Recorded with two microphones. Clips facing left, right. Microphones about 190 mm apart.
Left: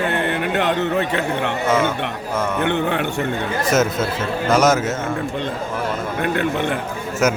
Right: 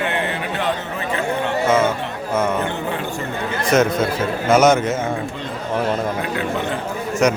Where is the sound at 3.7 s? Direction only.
Centre (ahead or behind).